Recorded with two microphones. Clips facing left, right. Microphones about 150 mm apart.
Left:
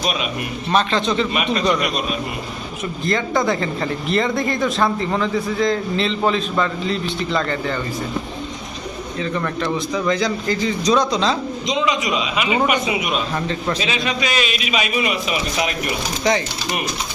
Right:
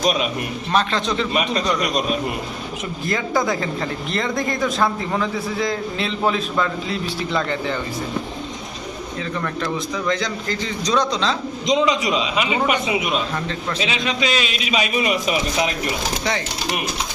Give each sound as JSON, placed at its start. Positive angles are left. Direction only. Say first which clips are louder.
{"t": 0.0, "sound": "a man's voice", "louder": "right 3 dB", "side_deg": -40}
{"t": 0.7, "sound": "speech", "louder": "left 2 dB", "side_deg": 0}
{"t": 3.1, "sound": "speech", "louder": "left 2 dB", "side_deg": -5}
{"t": 9.4, "sound": "a man's voice", "louder": "even", "side_deg": 0}
{"t": 11.7, "sound": "a man's voice", "louder": "right 3 dB", "side_deg": -35}